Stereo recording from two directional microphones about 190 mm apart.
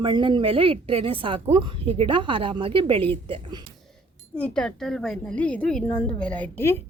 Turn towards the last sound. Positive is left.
turn(degrees=10)  # may be behind; listen again after turning